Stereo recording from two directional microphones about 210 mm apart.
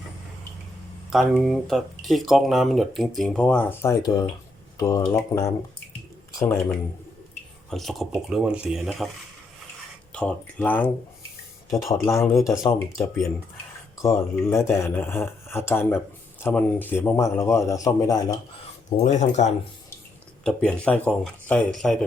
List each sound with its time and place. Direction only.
1.1 s speech: centre (ahead or behind)
10.1 s speech: 5° left (ahead or behind)
11.9 s speech: 15° left (ahead or behind)
19.0 s speech: 35° left (ahead or behind)
20.4 s speech: 5° left (ahead or behind)